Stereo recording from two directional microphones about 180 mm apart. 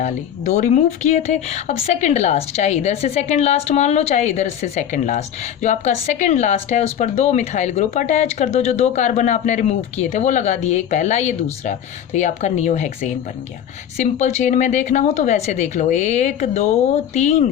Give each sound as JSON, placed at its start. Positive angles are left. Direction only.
{"t": 0.0, "sound": "speech", "side_deg": 40}
{"t": 13.9, "sound": "speech", "side_deg": 40}